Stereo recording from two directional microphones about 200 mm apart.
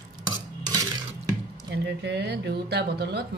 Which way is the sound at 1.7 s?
60° right (ahead or behind).